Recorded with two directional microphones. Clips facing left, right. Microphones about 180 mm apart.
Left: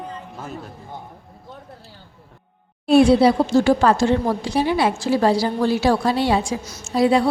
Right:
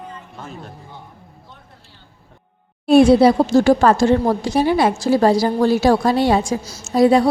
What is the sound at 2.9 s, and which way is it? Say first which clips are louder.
A woman's voice: right 3 dB; 45° right (ahead or behind).